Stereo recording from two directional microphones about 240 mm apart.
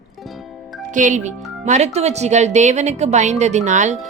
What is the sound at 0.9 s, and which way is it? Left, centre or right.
A woman's voice, right.